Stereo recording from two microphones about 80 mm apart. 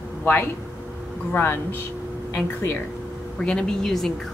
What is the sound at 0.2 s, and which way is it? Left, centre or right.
Speech, left.